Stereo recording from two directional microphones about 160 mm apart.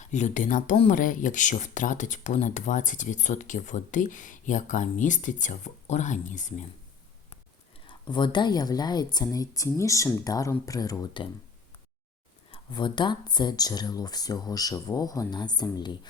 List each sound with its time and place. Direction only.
0.0 s speech: 50° left (ahead or behind)
7.9 s speech: 30° left (ahead or behind)
12.5 s speech: 30° left (ahead or behind)